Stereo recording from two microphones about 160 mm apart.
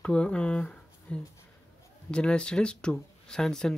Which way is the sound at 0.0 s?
5° left (ahead or behind).